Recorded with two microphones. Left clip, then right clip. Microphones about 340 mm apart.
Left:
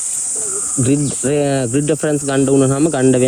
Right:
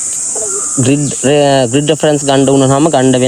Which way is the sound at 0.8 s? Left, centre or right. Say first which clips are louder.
Right 5 dB; centre.